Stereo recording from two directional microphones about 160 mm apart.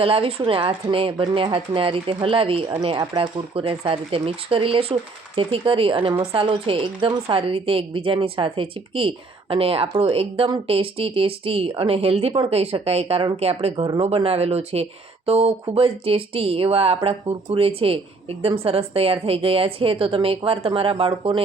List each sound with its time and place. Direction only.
0.0 s speech: 35° right (ahead or behind)
13.8 s speech: 25° right (ahead or behind)
14.1 s speech: 40° right (ahead or behind)